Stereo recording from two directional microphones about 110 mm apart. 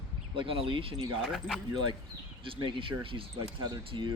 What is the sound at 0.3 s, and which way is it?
Speech, 60° right (ahead or behind).